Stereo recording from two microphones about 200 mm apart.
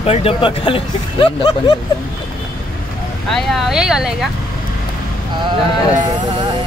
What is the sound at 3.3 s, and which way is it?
Speech, centre (ahead or behind).